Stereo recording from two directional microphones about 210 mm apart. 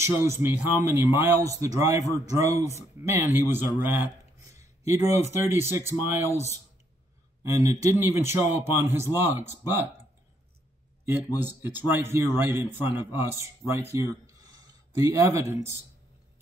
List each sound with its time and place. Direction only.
0.0 s speech: 10° right (ahead or behind)
7.4 s speech: 15° right (ahead or behind)
11.3 s speech: 10° right (ahead or behind)
13.9 s a sound: 15° right (ahead or behind)
15.0 s speech: 15° right (ahead or behind)